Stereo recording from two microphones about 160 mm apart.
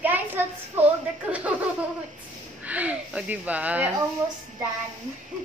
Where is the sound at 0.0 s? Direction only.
10° right (ahead or behind).